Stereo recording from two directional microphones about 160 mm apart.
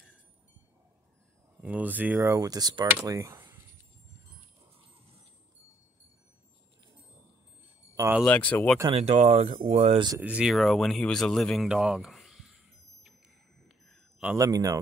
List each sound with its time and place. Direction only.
1.6 s speech: 10° right (ahead or behind)
8.2 s speech: 10° left (ahead or behind)
8.9 s speech: 40° right (ahead or behind)
10.2 s speech: 5° right (ahead or behind)
13.7 s chime: centre (ahead or behind)
14.3 s speech: 20° right (ahead or behind)